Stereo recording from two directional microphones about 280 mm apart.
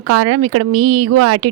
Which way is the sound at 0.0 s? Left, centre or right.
Right.